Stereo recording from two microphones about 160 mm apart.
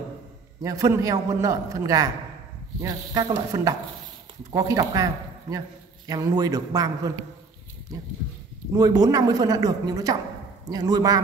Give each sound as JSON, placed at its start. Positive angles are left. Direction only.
{"t": 0.6, "sound": "a man's voice", "side_deg": -20}
{"t": 8.7, "sound": "a man's voice", "side_deg": -25}